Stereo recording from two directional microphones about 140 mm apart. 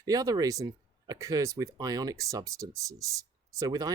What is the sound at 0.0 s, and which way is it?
Speech, 25° right (ahead or behind).